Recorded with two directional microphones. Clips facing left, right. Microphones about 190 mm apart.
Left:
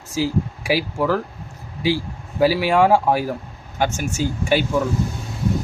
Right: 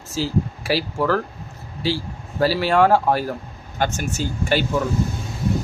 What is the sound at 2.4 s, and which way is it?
Speech, 10° left (ahead or behind).